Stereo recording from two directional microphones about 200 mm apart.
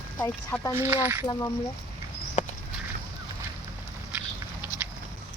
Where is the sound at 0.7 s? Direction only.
10° right (ahead or behind).